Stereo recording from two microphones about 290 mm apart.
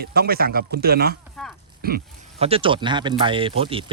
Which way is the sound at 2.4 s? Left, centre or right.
Centre.